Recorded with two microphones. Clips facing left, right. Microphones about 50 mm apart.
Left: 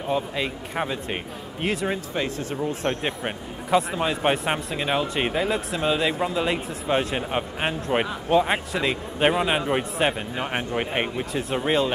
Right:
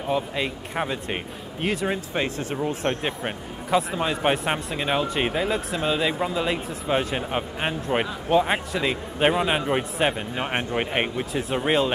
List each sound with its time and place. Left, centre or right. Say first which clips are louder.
0.1 s speech: even; centre
2.5 s speech: even; centre
2.9 s speech: even; centre
10.4 s speech: right 1 dB; centre